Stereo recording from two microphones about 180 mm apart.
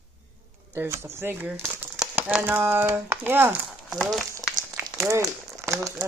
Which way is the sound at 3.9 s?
Centre (ahead or behind).